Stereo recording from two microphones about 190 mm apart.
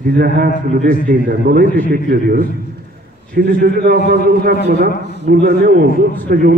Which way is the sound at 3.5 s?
50° right (ahead or behind).